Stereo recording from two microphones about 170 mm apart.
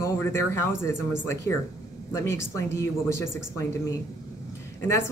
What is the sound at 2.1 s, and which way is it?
Speech, 15° left (ahead or behind).